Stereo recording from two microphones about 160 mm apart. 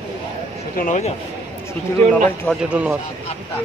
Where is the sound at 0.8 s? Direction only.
50° left (ahead or behind).